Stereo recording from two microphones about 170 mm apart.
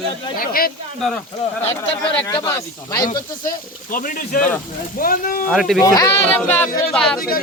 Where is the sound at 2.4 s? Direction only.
20° left (ahead or behind).